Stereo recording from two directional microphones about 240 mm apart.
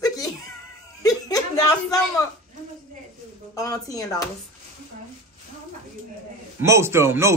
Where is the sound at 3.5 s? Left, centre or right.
Centre.